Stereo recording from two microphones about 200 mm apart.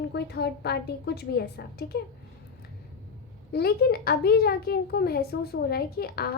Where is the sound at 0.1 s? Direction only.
55° left (ahead or behind).